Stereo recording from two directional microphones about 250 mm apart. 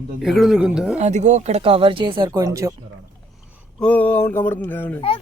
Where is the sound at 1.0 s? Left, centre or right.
Right.